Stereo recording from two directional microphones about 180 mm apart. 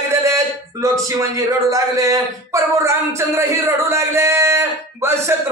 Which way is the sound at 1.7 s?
15° right (ahead or behind).